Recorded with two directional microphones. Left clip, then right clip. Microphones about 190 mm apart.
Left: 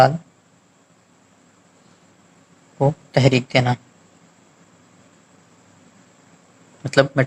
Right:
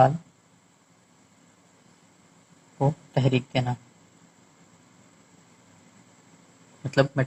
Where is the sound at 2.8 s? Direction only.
35° left (ahead or behind).